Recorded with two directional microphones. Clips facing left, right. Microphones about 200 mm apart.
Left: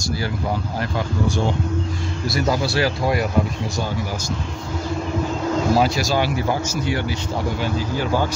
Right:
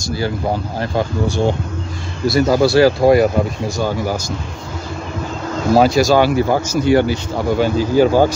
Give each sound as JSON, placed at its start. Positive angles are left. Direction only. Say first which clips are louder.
{"t": 2.2, "sound": "speech", "louder": "right 9 dB", "side_deg": -35}
{"t": 5.8, "sound": "speech", "louder": "right 7 dB", "side_deg": -40}